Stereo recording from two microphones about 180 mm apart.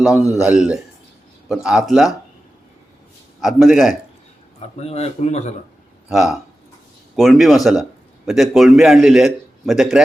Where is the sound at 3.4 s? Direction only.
Centre (ahead or behind).